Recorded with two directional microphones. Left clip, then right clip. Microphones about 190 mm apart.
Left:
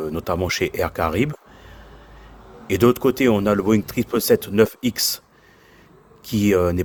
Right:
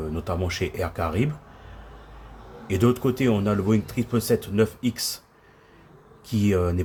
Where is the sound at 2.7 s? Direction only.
40° left (ahead or behind).